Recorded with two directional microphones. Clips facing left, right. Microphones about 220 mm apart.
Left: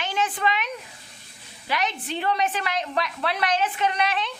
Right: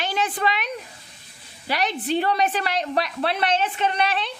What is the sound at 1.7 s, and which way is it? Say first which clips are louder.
A woman's voice: right 4 dB; 35° right (ahead or behind).